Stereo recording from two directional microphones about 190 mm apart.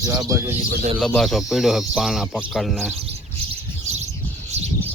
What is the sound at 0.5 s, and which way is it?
Speech, 35° right (ahead or behind).